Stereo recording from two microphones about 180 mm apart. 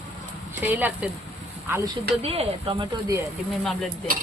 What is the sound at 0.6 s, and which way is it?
Speech, 10° right (ahead or behind).